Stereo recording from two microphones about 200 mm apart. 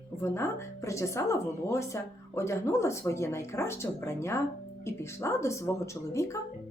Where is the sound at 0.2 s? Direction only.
15° left (ahead or behind).